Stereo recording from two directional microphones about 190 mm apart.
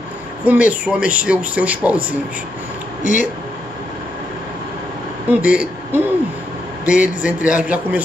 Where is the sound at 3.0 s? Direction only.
40° left (ahead or behind).